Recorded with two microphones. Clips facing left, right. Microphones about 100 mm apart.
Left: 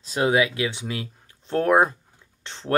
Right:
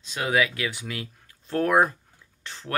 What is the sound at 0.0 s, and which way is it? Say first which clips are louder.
Speech: left 4 dB; 30° left (ahead or behind).